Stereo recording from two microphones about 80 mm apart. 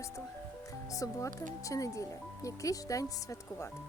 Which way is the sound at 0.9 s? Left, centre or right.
Left.